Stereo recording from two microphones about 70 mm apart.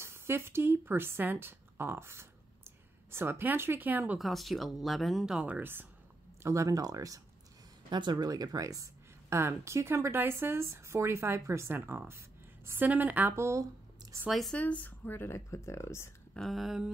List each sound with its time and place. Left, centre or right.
0.0 s a woman's voice: right
4.2 s speech: centre
5.5 s a woman's voice: right
6.4 s speech: right
7.9 s speech: right
9.3 s a woman's voice: right
13.4 s speech: right
14.5 s speech: left
16.3 s speech: centre